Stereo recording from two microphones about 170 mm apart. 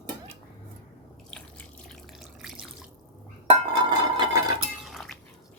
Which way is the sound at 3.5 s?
30° right (ahead or behind).